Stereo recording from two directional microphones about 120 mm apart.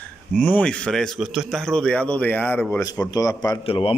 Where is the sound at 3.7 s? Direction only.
50° left (ahead or behind).